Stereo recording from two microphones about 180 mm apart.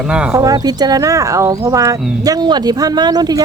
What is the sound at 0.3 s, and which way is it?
Speech, 20° right (ahead or behind).